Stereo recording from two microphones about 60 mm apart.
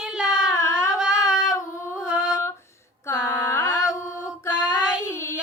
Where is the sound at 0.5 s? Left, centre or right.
Left.